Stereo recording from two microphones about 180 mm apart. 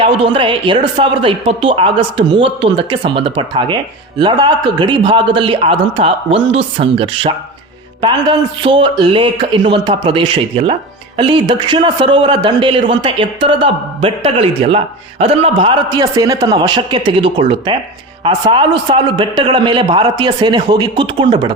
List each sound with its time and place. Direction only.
0.0 s speech: 30° right (ahead or behind)